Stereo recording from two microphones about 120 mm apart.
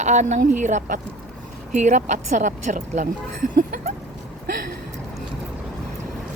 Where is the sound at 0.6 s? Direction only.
90° right.